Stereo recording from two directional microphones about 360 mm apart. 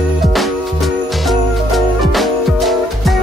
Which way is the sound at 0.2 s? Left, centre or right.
Centre.